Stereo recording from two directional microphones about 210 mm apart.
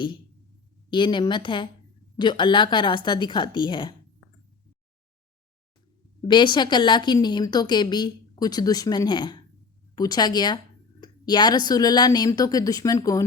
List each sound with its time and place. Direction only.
0.9 s a woman's voice: 20° left (ahead or behind)
6.2 s a woman's voice: 20° left (ahead or behind)